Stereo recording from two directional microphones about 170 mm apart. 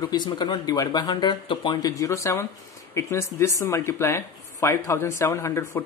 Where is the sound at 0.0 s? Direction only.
25° left (ahead or behind).